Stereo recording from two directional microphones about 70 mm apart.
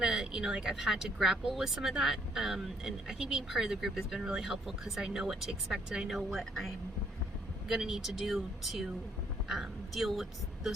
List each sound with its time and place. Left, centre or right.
0.0 s a woman's voice: centre